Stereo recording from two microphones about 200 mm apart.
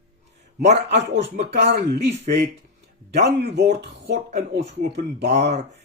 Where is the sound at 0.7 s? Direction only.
60° right (ahead or behind).